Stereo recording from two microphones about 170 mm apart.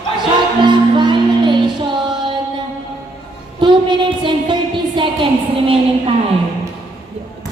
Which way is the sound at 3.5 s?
25° right (ahead or behind).